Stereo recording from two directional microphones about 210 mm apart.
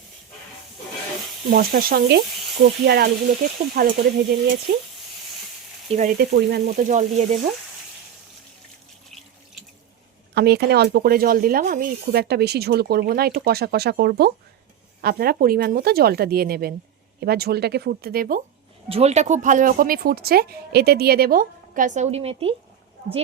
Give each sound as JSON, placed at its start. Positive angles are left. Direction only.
{"t": 1.5, "sound": "speech", "side_deg": -45}
{"t": 5.9, "sound": "speech", "side_deg": -35}
{"t": 6.1, "sound": "speech", "side_deg": -50}
{"t": 9.0, "sound": "water tap", "side_deg": 0}
{"t": 10.3, "sound": "speech", "side_deg": -50}
{"t": 18.9, "sound": "speech", "side_deg": -30}